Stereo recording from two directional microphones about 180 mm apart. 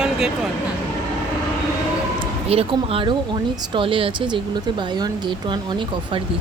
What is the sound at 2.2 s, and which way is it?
Speech, 30° right (ahead or behind).